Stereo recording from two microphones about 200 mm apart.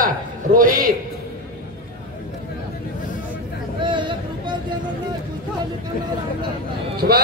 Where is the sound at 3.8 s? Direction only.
25° right (ahead or behind).